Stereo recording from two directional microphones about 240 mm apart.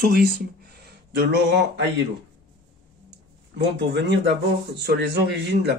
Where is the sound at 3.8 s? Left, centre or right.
Right.